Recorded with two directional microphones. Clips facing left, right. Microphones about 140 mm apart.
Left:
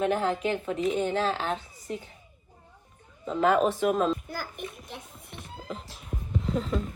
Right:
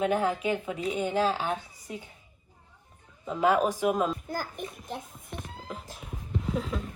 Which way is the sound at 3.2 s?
5° right (ahead or behind).